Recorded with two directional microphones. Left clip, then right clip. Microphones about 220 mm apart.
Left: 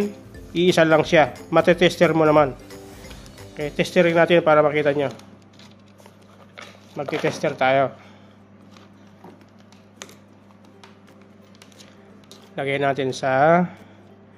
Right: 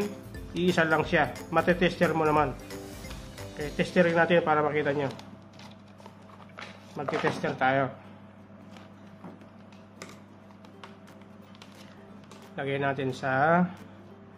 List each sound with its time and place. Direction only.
0.0 s music: centre (ahead or behind)
0.7 s speech: 40° left (ahead or behind)
2.5 s music: centre (ahead or behind)
3.7 s speech: 40° left (ahead or behind)
7.0 s speech: 35° left (ahead or behind)
12.5 s speech: 40° left (ahead or behind)